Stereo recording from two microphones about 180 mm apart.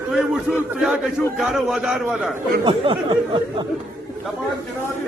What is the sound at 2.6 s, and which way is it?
Speech, 30° right (ahead or behind).